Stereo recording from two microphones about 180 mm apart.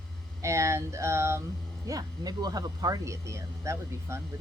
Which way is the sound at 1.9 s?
20° right (ahead or behind).